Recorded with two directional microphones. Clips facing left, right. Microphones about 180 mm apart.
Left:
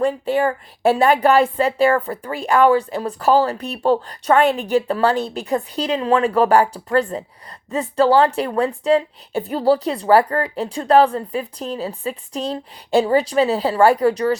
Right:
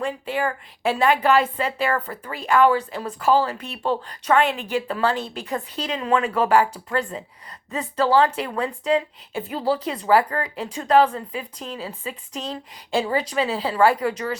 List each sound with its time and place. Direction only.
0.0 s speech: 35° left (ahead or behind)